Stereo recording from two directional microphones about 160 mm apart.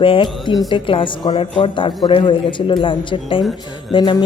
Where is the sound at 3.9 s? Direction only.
30° left (ahead or behind).